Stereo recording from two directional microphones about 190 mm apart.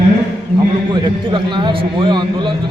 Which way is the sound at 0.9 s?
25° right (ahead or behind).